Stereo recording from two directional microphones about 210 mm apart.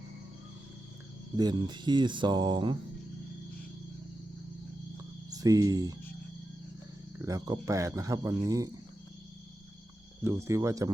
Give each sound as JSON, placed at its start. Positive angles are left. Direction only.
{"t": 1.4, "sound": "speech", "side_deg": -20}
{"t": 5.3, "sound": "cricket", "side_deg": -15}
{"t": 7.2, "sound": "speech", "side_deg": -15}
{"t": 10.2, "sound": "speech", "side_deg": -10}